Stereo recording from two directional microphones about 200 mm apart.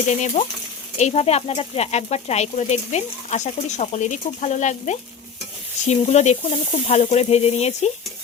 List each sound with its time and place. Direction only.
0.1 s speech: 35° left (ahead or behind)